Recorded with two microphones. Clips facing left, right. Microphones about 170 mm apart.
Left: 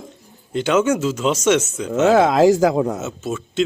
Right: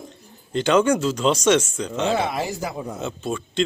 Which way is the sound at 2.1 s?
90° left.